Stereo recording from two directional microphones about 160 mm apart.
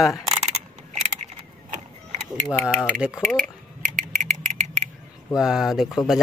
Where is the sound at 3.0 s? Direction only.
5° right (ahead or behind).